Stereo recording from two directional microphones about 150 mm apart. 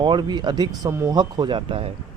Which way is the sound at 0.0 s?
30° right (ahead or behind).